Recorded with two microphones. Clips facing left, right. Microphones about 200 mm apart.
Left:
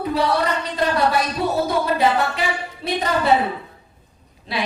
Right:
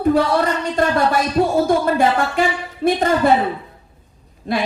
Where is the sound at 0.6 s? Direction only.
50° right (ahead or behind).